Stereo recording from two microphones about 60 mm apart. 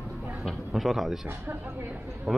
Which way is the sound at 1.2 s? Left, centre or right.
Right.